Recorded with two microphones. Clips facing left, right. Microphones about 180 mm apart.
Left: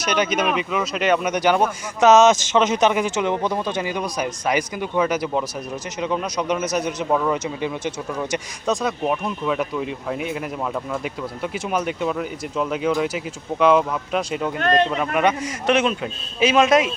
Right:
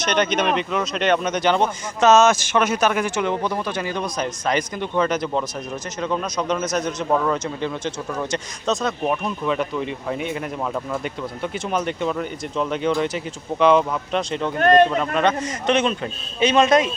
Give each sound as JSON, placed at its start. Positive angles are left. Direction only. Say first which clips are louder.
{"t": 0.0, "sound": "speech", "louder": "right 1 dB", "side_deg": 5}